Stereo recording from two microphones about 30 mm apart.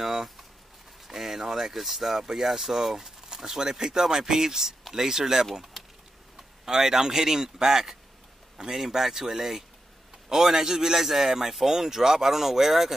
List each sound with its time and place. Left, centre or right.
0.0 s a sound: centre
1.0 s speech: centre
6.6 s speech: centre